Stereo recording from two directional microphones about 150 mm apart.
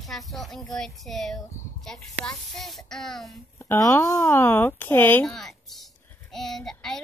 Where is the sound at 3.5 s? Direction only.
20° left (ahead or behind).